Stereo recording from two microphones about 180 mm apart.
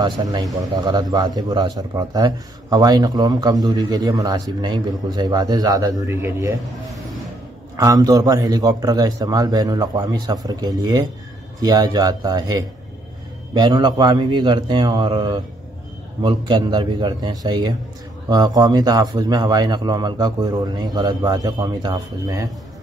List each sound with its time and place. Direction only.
0.0 s speech: 20° right (ahead or behind)